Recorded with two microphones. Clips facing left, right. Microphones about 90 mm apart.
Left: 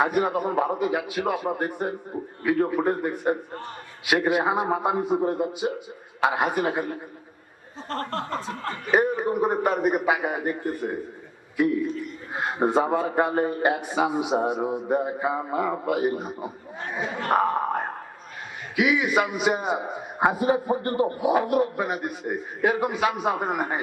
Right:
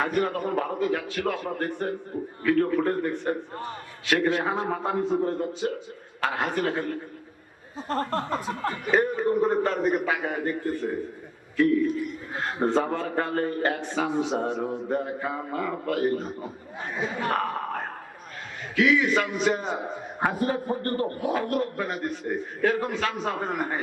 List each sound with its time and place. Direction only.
0.0 s a man's voice: 15° left (ahead or behind)
7.9 s chuckle: 10° right (ahead or behind)
8.9 s a man's voice: 15° left (ahead or behind)